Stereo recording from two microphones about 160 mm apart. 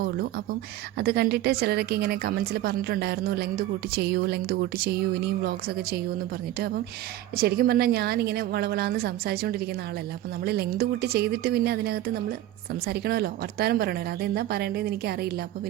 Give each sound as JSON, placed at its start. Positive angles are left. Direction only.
{"t": 0.0, "sound": "a woman's voice", "side_deg": -70}
{"t": 0.9, "sound": "a woman's voice", "side_deg": -85}
{"t": 10.4, "sound": "a woman's voice", "side_deg": -85}